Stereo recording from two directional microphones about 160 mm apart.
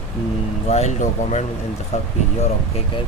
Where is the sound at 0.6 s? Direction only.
45° left (ahead or behind).